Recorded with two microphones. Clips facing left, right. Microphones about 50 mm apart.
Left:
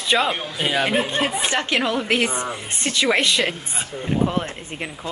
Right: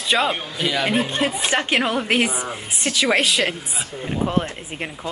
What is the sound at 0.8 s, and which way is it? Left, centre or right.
Speech, centre.